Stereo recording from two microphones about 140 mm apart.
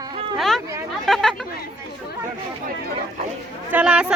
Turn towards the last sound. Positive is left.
turn(degrees=-10)  # may be behind; listen again after turning